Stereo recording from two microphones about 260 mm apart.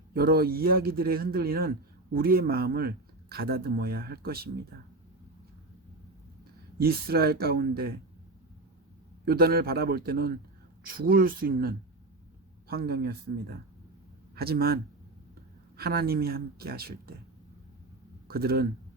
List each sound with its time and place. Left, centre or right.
0.1 s speech: right
6.7 s speech: right
9.2 s speech: right
15.8 s speech: right
18.3 s speech: right